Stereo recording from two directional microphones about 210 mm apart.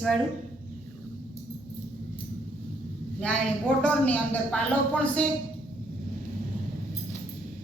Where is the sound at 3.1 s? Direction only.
5° left (ahead or behind).